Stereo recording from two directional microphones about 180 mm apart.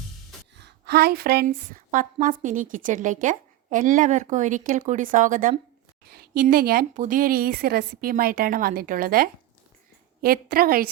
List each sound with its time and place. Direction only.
0.5 s a woman's voice: 65° right (ahead or behind)